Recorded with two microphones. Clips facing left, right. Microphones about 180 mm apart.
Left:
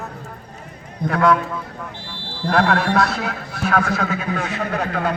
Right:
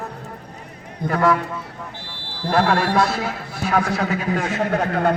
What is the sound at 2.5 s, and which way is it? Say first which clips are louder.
Speech: even; 5° right (ahead or behind).